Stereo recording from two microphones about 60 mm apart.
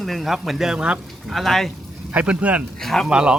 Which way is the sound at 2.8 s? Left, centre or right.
Centre.